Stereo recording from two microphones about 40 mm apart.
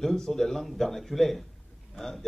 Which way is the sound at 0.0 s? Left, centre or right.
Centre.